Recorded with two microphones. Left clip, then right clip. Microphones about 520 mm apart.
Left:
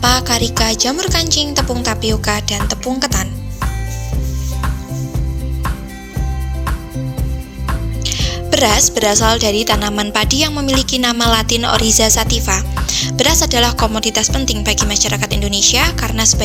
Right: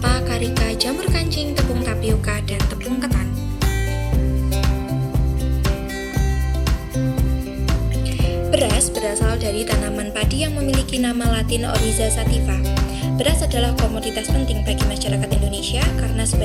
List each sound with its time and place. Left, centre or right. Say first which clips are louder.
0.0 s music: left 8 dB; centre
8.0 s music: left 6 dB; centre